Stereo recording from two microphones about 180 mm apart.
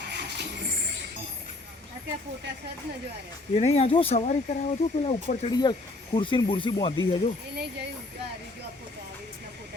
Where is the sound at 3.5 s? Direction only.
35° left (ahead or behind).